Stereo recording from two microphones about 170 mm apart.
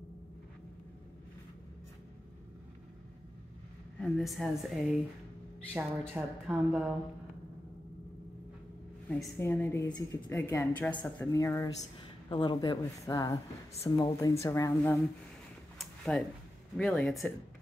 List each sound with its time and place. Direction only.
4.0 s a woman's voice: centre (ahead or behind)
9.4 s a woman's voice: 10° left (ahead or behind)
9.8 s a woman's voice: 25° left (ahead or behind)
15.8 s a sound: centre (ahead or behind)
16.7 s a woman's voice: 5° left (ahead or behind)